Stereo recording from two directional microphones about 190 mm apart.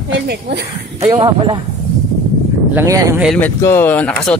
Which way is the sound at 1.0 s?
20° right (ahead or behind).